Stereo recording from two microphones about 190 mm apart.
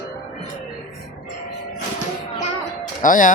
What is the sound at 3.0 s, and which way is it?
Speech, 45° left (ahead or behind).